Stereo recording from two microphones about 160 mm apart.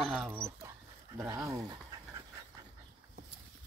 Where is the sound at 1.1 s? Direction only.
15° right (ahead or behind).